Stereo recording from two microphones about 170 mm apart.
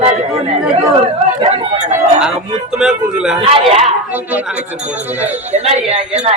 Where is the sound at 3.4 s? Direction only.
40° right (ahead or behind).